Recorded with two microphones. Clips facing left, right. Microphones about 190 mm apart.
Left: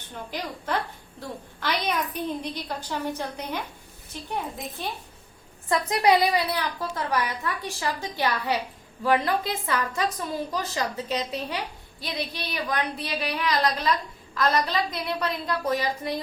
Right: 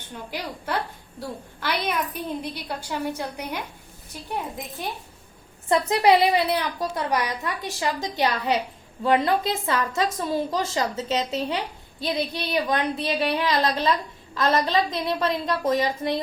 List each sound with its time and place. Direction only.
0.3 s a woman's voice: 10° right (ahead or behind)
5.6 s a woman's voice: 30° right (ahead or behind)